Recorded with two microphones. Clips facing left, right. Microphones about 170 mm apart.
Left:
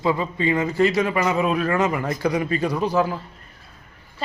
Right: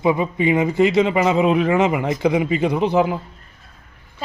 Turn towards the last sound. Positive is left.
turn(degrees=-20)  # may be behind; listen again after turning